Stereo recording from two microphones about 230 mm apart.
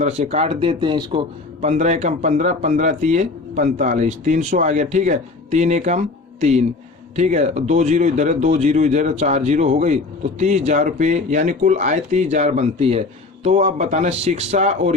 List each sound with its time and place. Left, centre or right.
0.0 s a man's voice: right